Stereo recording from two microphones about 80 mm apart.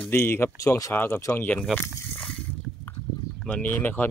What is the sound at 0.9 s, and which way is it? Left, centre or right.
Speech, left.